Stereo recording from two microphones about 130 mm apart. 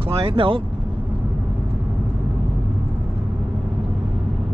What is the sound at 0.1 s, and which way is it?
Speech, 45° right (ahead or behind).